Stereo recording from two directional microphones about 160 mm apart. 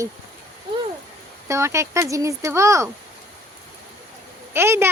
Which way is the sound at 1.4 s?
15° right (ahead or behind).